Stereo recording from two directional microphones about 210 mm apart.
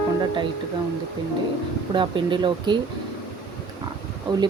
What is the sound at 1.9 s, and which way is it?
Speech, 20° right (ahead or behind).